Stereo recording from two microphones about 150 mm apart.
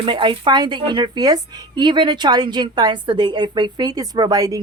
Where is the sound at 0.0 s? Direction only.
35° right (ahead or behind).